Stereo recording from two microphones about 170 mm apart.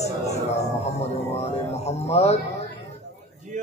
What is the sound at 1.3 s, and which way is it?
Music, 40° left (ahead or behind).